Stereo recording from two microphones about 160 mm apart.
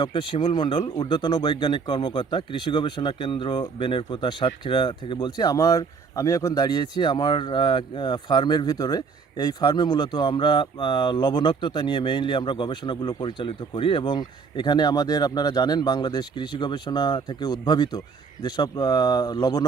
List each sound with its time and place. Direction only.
0.0 s speech: 30° left (ahead or behind)